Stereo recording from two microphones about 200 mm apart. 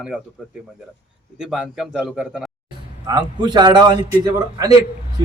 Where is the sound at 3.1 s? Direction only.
20° right (ahead or behind).